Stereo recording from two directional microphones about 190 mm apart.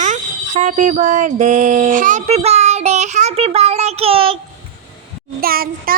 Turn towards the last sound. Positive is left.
turn(degrees=-50)  # may be behind; listen again after turning